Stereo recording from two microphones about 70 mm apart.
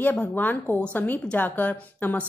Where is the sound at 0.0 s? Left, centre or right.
Left.